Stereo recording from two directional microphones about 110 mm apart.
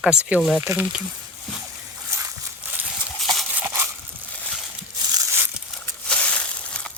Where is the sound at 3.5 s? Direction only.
20° right (ahead or behind).